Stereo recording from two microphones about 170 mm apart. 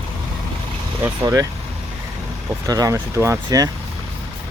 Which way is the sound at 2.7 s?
20° right (ahead or behind).